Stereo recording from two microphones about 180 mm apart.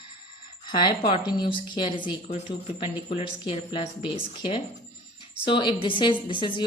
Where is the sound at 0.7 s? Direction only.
25° left (ahead or behind).